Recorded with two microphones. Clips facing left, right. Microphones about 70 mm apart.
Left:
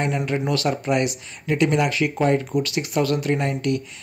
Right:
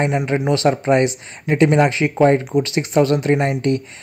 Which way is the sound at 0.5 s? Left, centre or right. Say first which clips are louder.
Right 8 dB; right.